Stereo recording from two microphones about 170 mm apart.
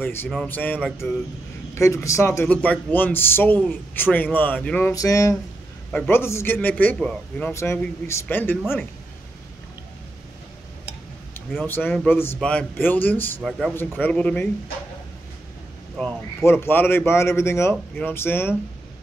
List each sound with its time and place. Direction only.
0.0 s speech: 10° left (ahead or behind)
1.8 s speech: 15° left (ahead or behind)
4.9 s speech: 20° left (ahead or behind)
5.9 s speech: 10° left (ahead or behind)
11.6 s speech: 10° left (ahead or behind)
13.4 s speech: centre (ahead or behind)
16.0 s speech: 10° left (ahead or behind)